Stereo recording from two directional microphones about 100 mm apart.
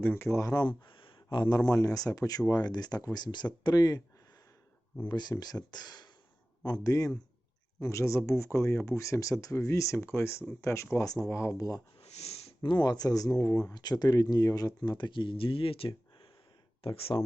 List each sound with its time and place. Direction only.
0.0 s speech: 20° left (ahead or behind)
0.3 s speech: 30° left (ahead or behind)
0.6 s speech: 55° left (ahead or behind); by 4.0 s 40° left (ahead or behind)
5.0 s speech: 45° left (ahead or behind); by 11.8 s 30° left (ahead or behind)
11.9 s sniff: 90° left
12.6 s speech: 45° left (ahead or behind)
14.8 s speech: 50° left (ahead or behind); by 17.2 s 70° left (ahead or behind)